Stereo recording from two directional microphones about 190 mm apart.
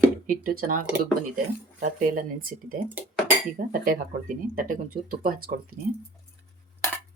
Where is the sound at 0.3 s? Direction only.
45° right (ahead or behind).